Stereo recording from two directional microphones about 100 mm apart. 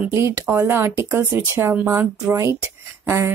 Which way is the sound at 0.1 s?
25° right (ahead or behind).